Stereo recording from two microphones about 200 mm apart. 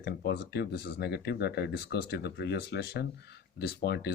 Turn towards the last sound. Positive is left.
turn(degrees=55)  # may be behind; listen again after turning